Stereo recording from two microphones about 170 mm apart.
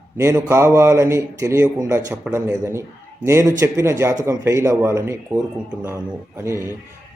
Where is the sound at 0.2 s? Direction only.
15° right (ahead or behind).